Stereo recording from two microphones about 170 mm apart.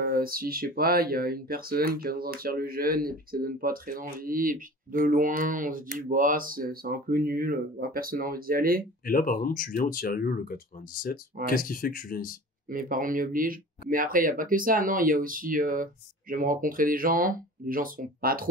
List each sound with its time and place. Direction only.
0.0 s speech: 60° right (ahead or behind)
9.0 s speech: 55° left (ahead or behind)
12.6 s speech: 55° right (ahead or behind)